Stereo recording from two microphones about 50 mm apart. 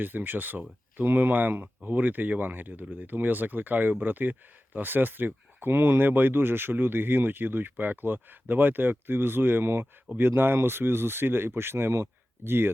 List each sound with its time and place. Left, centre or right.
0.0 s speech: right